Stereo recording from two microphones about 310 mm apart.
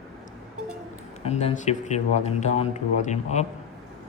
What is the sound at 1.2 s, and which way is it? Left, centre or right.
Speech, centre.